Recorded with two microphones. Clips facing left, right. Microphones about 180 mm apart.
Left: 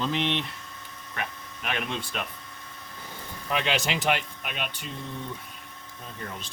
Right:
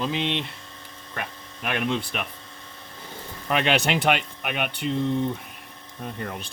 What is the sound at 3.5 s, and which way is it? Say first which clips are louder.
Speech: right 5 dB; 65° right (ahead or behind).